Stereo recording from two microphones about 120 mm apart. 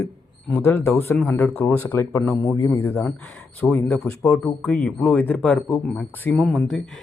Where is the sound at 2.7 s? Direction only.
10° left (ahead or behind).